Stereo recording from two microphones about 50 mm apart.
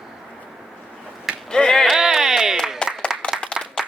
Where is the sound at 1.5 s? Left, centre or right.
Centre.